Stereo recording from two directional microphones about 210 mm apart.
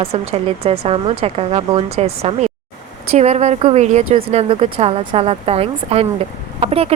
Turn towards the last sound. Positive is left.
turn(degrees=-30)  # may be behind; listen again after turning